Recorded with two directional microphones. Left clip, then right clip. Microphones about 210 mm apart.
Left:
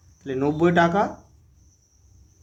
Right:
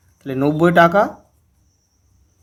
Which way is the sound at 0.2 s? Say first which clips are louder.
Right 5 dB; 35° right (ahead or behind).